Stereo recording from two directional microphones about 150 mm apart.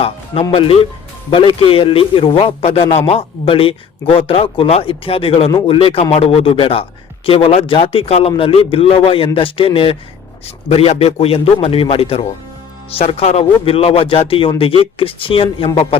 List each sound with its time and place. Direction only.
0.5 s speech: 40° left (ahead or behind)